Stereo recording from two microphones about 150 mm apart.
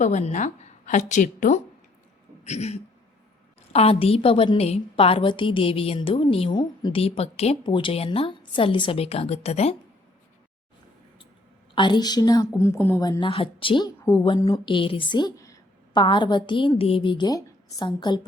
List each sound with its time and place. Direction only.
0.0 s a woman's voice: 50° left (ahead or behind)
11.7 s a woman's voice: 30° left (ahead or behind); by 13.0 s 15° left (ahead or behind)
13.0 s a woman's voice: 30° left (ahead or behind)
14.0 s a woman's voice: 25° left (ahead or behind)